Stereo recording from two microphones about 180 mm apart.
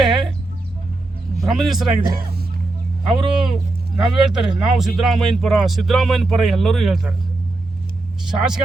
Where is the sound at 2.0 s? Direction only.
55° right (ahead or behind).